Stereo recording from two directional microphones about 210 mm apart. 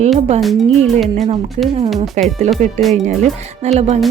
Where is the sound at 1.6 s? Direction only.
30° right (ahead or behind).